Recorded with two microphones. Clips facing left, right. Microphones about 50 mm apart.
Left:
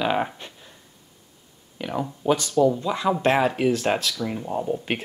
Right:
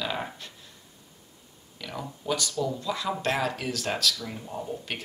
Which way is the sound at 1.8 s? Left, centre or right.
Left.